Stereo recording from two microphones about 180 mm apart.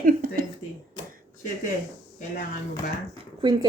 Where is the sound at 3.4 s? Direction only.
25° right (ahead or behind).